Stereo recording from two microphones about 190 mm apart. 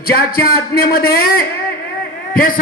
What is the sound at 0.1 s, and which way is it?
A man's voice, 50° left (ahead or behind).